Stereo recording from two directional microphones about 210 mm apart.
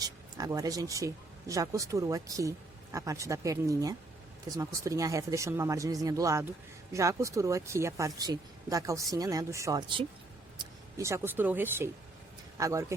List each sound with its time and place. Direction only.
0.0 s speech: 15° right (ahead or behind)